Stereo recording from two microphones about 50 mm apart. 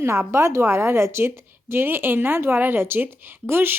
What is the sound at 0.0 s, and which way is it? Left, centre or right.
A woman's voice, right.